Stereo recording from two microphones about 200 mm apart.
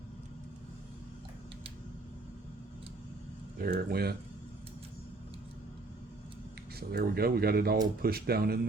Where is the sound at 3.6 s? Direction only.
50° right (ahead or behind).